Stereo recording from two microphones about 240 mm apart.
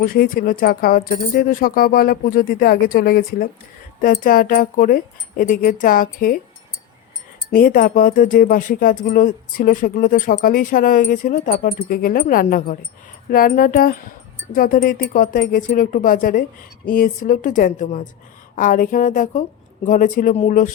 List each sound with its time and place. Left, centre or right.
0.0 s speech: left
7.5 s speech: left